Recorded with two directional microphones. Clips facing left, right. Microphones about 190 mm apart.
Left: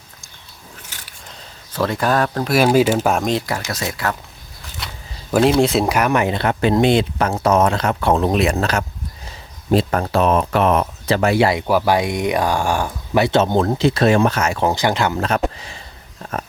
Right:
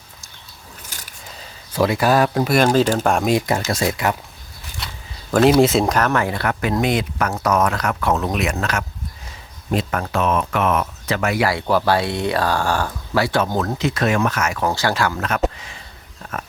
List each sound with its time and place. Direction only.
0.9 s a sound: 40° right (ahead or behind)
1.7 s speech: 10° right (ahead or behind)
2.6 s speech: 5° left (ahead or behind)
3.7 s speech: 25° right (ahead or behind)
5.4 s speech: centre (ahead or behind)
5.9 s speech: 15° left (ahead or behind)
11.6 s speech: 15° left (ahead or behind)
15.5 s a sound: 30° left (ahead or behind)